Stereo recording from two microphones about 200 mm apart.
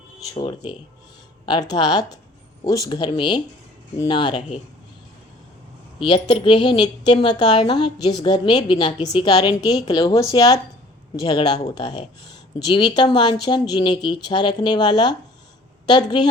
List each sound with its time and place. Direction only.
0.3 s a woman's voice: 25° left (ahead or behind)
6.0 s a woman's voice: 25° left (ahead or behind)